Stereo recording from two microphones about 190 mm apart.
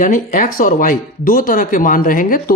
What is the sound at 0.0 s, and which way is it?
Speech, 45° left (ahead or behind).